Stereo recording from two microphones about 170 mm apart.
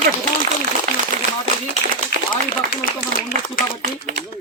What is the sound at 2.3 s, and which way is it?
Speech, 55° left (ahead or behind).